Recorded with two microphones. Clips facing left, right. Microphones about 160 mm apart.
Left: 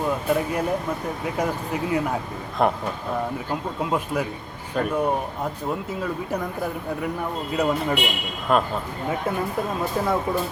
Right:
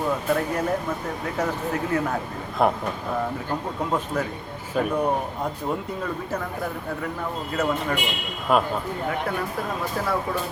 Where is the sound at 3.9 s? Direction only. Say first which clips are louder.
Left 1 dB; 10° left (ahead or behind).